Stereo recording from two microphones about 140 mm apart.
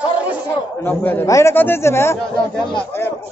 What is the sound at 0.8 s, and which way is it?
A man's voice, 15° left (ahead or behind).